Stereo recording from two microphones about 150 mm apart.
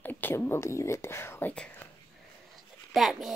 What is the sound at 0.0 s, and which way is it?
Speech, 15° left (ahead or behind).